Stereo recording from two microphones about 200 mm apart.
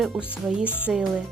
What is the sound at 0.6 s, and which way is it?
Speech, 10° left (ahead or behind).